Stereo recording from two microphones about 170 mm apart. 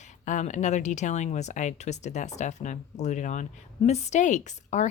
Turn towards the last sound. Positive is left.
turn(degrees=45)  # may be behind; listen again after turning